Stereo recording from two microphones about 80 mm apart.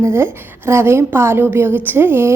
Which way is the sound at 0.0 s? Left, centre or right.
Right.